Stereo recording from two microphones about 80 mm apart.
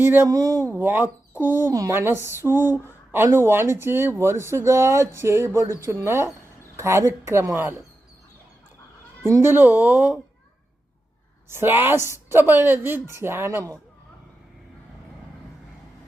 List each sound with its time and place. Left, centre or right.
0.0 s a woman's voice: right
0.3 s speech: right
0.8 s a woman's voice: right
2.8 s a sound: right
3.3 s a woman's voice: right
9.2 s a woman's voice: right
11.4 s a woman's voice: right